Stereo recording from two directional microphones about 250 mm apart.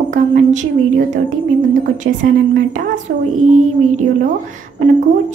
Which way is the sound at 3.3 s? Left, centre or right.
Right.